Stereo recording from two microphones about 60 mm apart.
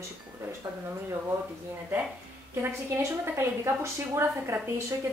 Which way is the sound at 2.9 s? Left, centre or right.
Right.